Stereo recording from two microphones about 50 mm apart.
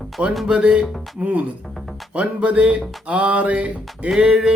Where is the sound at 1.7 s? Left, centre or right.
Centre.